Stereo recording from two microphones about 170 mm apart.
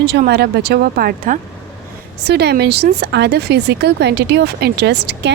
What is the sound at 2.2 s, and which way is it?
Speech, 75° right (ahead or behind).